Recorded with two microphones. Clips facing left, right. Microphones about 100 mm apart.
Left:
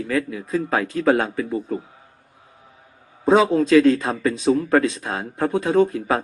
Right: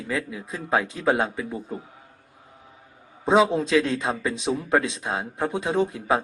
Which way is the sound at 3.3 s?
25° right (ahead or behind).